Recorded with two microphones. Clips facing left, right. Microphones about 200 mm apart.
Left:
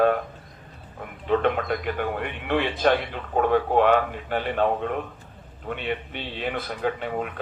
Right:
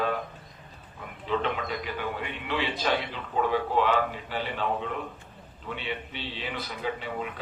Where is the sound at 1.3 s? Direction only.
55° left (ahead or behind).